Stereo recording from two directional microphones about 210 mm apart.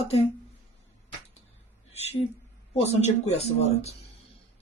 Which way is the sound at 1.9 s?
30° left (ahead or behind).